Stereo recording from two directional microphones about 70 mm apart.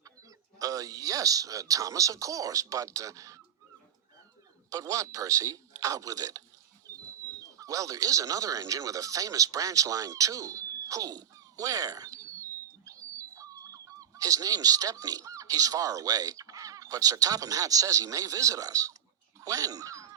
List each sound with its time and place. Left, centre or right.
0.6 s speech: right
4.7 s speech: right
6.8 s a sound: right
7.6 s speech: right
19.4 s quack: right